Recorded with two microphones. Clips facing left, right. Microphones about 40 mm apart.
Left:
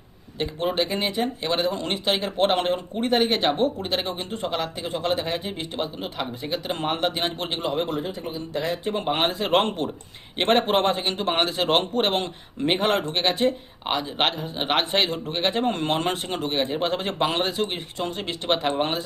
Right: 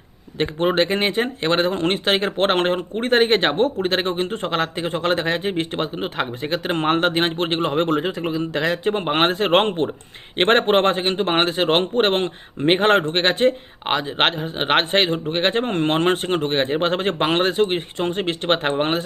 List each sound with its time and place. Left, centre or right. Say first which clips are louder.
0.3 s speech: right 6 dB; right
7.9 s speech: right 7 dB; right
8.9 s speech: right 4 dB; right